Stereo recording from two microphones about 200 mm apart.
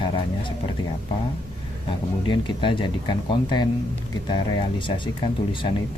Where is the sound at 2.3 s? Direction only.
25° left (ahead or behind).